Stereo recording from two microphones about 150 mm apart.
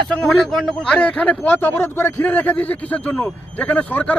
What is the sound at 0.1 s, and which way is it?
A man's voice, 5° left (ahead or behind).